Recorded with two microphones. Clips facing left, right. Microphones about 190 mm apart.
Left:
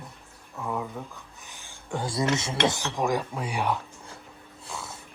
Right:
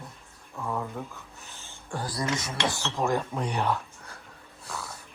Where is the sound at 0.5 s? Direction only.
5° left (ahead or behind).